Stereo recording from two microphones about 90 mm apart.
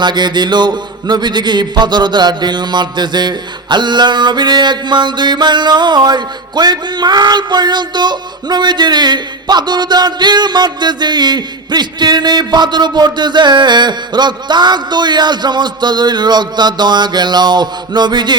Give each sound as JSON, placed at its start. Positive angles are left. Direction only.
{"t": 0.0, "sound": "speech", "side_deg": -55}